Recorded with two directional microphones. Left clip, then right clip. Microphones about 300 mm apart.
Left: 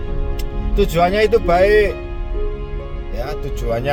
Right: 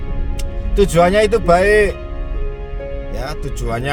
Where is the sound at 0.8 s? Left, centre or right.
Right.